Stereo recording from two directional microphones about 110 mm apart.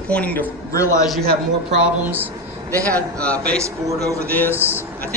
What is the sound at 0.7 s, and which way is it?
Speech, 30° left (ahead or behind).